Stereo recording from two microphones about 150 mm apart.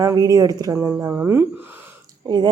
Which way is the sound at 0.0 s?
25° right (ahead or behind).